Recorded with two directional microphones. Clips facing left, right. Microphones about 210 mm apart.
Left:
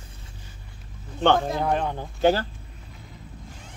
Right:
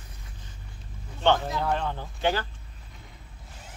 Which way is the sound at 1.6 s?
20° left (ahead or behind).